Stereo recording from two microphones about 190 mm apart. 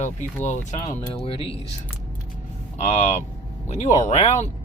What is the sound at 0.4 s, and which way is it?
Speech, 40° left (ahead or behind).